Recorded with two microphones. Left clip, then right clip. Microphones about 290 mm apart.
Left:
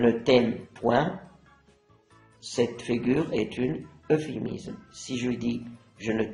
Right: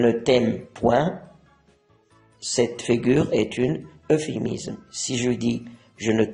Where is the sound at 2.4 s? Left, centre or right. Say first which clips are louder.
Right 5 dB; right.